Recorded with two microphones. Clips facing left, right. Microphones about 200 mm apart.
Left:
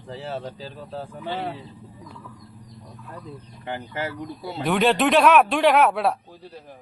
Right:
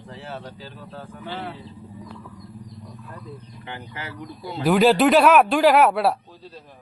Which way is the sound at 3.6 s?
40° left (ahead or behind).